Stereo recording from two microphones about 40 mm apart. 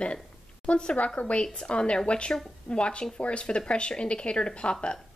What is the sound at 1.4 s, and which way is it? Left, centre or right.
A woman's voice, left.